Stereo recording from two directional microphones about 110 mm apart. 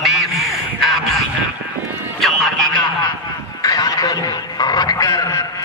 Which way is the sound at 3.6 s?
30° left (ahead or behind).